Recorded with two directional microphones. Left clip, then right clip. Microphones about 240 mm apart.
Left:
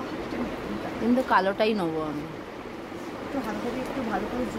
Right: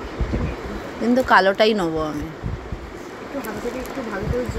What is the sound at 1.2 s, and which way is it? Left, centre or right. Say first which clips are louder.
Speech: right 9 dB; right.